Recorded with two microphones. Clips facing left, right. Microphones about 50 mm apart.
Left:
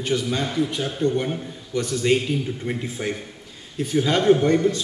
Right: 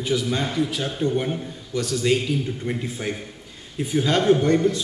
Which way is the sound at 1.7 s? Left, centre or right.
Left.